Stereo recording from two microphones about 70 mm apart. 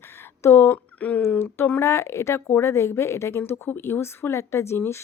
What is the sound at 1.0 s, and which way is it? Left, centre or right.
Speech, left.